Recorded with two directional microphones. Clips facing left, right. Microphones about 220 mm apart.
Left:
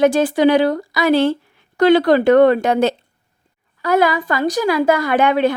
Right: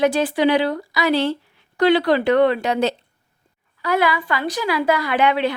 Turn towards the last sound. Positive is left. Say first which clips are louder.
# left 4 dB
turn(degrees=45)  # may be behind; listen again after turning